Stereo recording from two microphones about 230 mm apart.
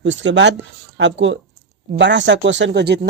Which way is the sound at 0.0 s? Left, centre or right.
Right.